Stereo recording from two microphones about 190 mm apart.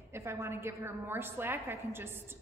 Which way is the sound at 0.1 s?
15° right (ahead or behind).